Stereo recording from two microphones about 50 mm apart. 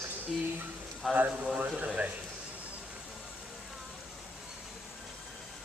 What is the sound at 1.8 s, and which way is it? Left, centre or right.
Speech, right.